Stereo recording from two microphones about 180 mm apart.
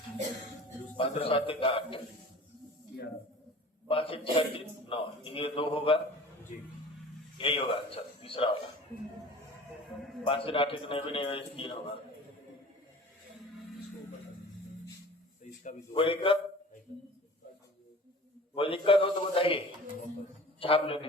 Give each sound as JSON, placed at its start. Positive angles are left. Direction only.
{"t": 0.9, "sound": "a man's voice", "side_deg": 30}
{"t": 3.8, "sound": "a man's voice", "side_deg": 30}
{"t": 7.3, "sound": "a man's voice", "side_deg": 30}
{"t": 10.2, "sound": "a man's voice", "side_deg": 30}
{"t": 16.0, "sound": "a man's voice", "side_deg": 30}
{"t": 18.5, "sound": "a man's voice", "side_deg": 30}